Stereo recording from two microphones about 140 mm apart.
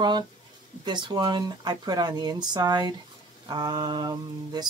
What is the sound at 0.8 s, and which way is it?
Mantra, 30° right (ahead or behind).